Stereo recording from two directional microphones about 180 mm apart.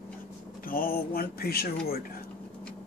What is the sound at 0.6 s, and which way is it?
Speech, 55° left (ahead or behind).